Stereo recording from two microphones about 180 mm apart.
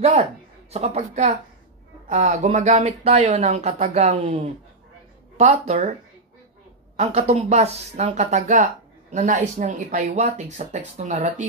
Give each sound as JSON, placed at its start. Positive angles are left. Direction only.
{"t": 0.0, "sound": "speech", "side_deg": -35}
{"t": 7.0, "sound": "speech", "side_deg": -35}